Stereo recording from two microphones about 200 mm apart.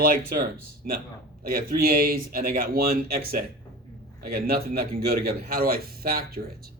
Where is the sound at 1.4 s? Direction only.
50° right (ahead or behind).